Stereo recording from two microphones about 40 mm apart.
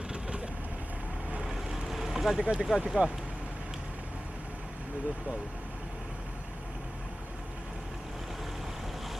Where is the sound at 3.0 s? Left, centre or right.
Right.